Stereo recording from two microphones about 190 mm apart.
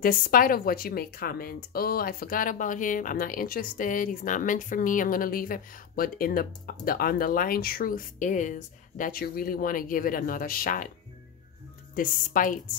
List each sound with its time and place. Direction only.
0.0 s speech: 50° left (ahead or behind)
11.9 s speech: 45° left (ahead or behind)